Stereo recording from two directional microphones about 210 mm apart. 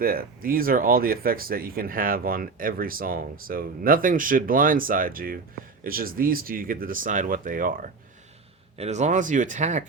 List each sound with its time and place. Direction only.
0.0 s speech: 45° right (ahead or behind)